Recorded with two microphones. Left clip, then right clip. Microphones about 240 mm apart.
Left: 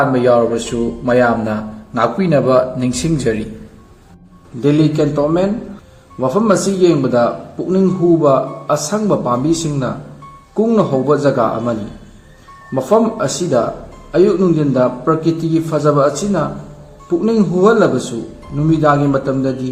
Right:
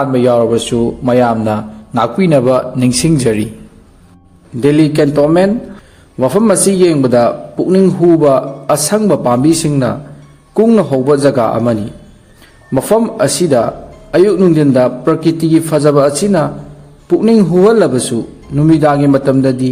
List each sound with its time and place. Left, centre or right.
0.0 s speech: right
4.6 s speech: right
12.7 s speech: right